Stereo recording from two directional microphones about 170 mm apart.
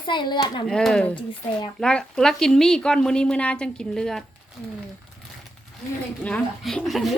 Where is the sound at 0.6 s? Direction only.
5° left (ahead or behind).